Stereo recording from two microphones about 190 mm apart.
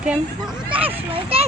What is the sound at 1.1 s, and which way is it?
Speech, 30° right (ahead or behind).